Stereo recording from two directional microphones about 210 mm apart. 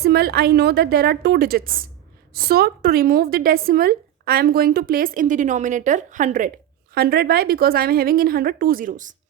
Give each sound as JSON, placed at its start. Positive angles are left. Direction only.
{"t": 0.0, "sound": "a woman's voice", "side_deg": -50}